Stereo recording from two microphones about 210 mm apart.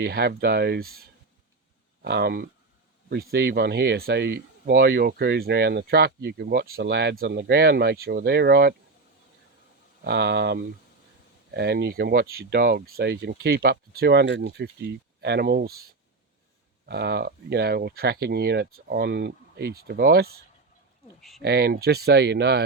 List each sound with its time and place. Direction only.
0.0 s speech: 50° right (ahead or behind)
2.0 s speech: 50° right (ahead or behind)
10.0 s speech: 55° right (ahead or behind)
16.8 s speech: 50° right (ahead or behind)
21.2 s speech: centre (ahead or behind)
21.4 s speech: 50° right (ahead or behind)